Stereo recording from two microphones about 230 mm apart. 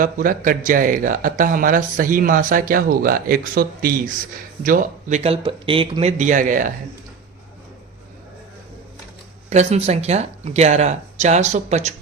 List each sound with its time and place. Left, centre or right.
0.0 s speech: right
9.5 s speech: right